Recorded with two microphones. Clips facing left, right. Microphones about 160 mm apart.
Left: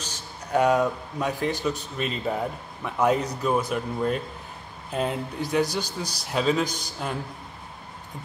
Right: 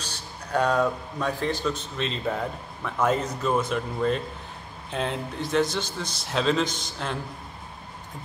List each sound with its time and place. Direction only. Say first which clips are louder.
0.5 s speech: left 2 dB; 15° left (ahead or behind)